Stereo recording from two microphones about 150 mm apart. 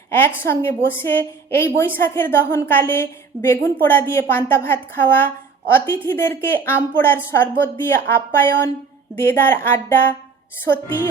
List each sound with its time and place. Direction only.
0.1 s a woman's voice: 15° left (ahead or behind)